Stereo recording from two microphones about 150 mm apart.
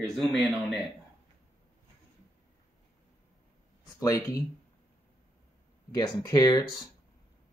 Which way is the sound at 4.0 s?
20° left (ahead or behind).